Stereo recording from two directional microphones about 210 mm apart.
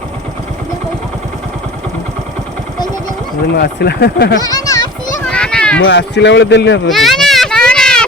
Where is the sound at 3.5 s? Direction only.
50° left (ahead or behind).